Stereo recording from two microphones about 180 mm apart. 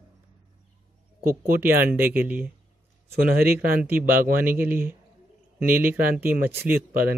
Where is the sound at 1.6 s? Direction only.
10° right (ahead or behind).